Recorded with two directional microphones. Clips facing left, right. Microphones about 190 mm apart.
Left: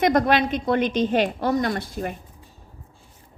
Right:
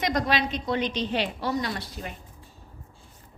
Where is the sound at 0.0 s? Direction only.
55° left (ahead or behind).